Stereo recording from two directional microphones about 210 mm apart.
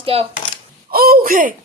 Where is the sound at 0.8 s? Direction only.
45° right (ahead or behind).